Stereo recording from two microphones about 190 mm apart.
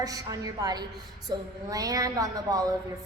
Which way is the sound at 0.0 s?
20° right (ahead or behind).